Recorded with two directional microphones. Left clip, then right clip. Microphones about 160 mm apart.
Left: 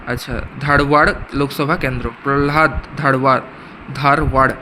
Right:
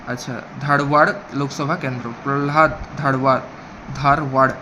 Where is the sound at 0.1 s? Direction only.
25° left (ahead or behind).